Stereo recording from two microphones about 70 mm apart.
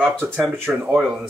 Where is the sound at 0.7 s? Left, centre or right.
Centre.